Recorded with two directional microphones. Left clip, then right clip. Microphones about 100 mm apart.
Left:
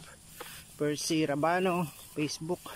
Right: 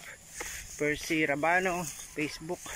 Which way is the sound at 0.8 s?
20° left (ahead or behind).